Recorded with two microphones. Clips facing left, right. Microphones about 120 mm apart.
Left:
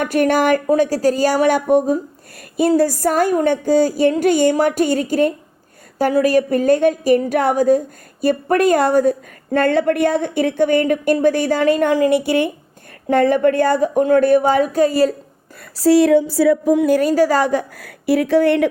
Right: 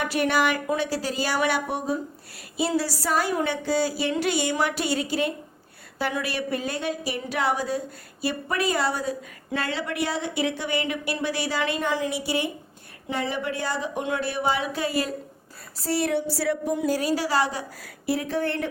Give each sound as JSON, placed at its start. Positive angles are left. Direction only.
{"t": 0.0, "sound": "a woman's voice", "side_deg": 50}
{"t": 15.8, "sound": "speech", "side_deg": 90}
{"t": 16.7, "sound": "speech", "side_deg": 70}
{"t": 17.0, "sound": "a woman's voice", "side_deg": 45}